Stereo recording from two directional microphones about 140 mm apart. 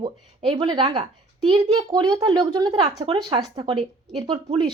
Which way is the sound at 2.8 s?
40° right (ahead or behind).